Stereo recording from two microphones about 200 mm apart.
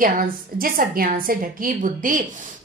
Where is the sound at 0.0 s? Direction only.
45° right (ahead or behind).